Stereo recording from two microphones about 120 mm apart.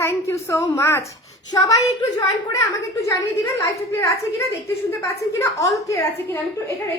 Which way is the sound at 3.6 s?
25° left (ahead or behind).